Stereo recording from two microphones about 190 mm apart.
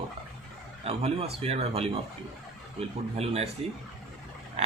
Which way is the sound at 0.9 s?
30° right (ahead or behind).